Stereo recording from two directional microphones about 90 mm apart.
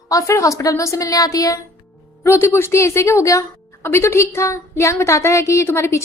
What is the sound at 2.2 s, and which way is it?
Speech, 25° left (ahead or behind).